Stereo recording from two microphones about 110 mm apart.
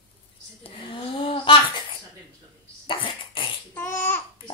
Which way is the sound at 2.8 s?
50° left (ahead or behind).